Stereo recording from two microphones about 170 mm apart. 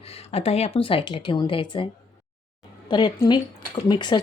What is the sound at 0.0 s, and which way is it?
Speech, 35° left (ahead or behind).